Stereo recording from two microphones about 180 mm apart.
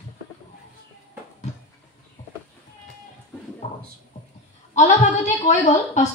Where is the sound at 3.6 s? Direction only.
40° left (ahead or behind).